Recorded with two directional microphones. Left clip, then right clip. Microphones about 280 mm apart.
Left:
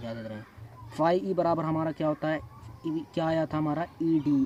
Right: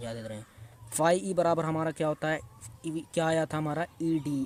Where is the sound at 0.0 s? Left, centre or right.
Right.